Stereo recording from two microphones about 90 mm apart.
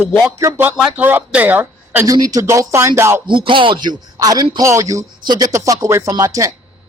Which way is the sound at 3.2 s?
65° right (ahead or behind).